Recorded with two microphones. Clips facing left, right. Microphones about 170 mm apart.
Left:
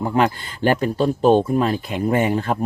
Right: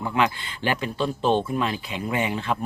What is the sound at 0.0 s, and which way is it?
Speech, 40° left (ahead or behind).